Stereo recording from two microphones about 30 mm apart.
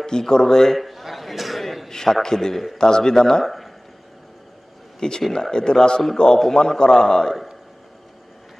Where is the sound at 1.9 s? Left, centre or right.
Centre.